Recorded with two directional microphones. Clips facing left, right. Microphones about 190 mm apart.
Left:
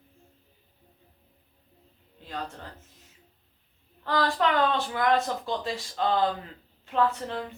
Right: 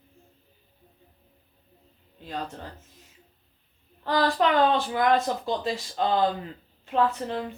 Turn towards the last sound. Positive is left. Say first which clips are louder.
# right 2 dB
turn(degrees=-15)  # may be behind; listen again after turning